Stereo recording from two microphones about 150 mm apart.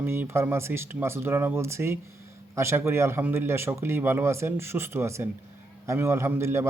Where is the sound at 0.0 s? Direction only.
15° right (ahead or behind).